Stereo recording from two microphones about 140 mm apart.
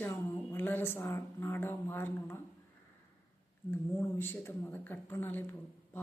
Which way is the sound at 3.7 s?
15° left (ahead or behind).